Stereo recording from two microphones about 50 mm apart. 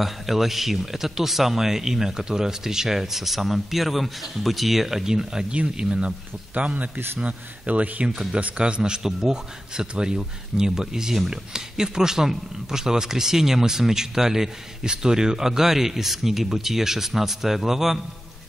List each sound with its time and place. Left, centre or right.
0.0 s speech: centre
6.5 s speech: right
8.1 s a man's voice: centre
8.4 s a man's voice: right; by 18.0 s centre